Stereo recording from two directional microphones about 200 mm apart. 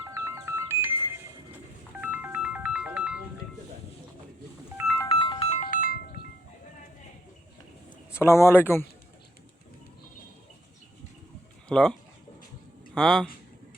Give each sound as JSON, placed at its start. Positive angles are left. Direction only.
{"t": 0.0, "sound": "music", "side_deg": -15}
{"t": 4.9, "sound": "music", "side_deg": 20}
{"t": 5.7, "sound": "ringtone", "side_deg": 45}
{"t": 8.1, "sound": "speech", "side_deg": 15}
{"t": 11.7, "sound": "speech", "side_deg": 5}